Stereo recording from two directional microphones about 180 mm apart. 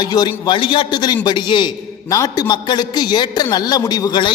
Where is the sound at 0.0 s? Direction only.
25° left (ahead or behind).